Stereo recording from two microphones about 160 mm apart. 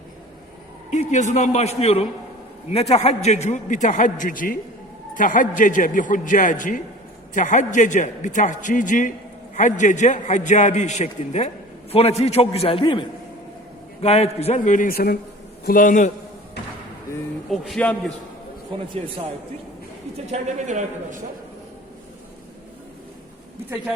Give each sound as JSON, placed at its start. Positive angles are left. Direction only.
{"t": 0.9, "sound": "a man's voice", "side_deg": 50}
{"t": 15.6, "sound": "a man's voice", "side_deg": 60}
{"t": 17.5, "sound": "a man's voice", "side_deg": 0}
{"t": 20.2, "sound": "a man's voice", "side_deg": -45}